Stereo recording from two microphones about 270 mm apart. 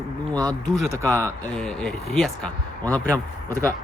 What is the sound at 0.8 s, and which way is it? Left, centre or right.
Speech, centre.